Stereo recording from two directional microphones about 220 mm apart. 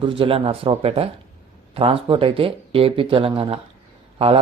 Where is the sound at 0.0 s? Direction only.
25° right (ahead or behind).